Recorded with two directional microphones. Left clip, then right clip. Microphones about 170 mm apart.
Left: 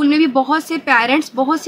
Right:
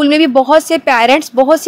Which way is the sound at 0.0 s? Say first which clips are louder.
Right 5 dB; 40° right (ahead or behind).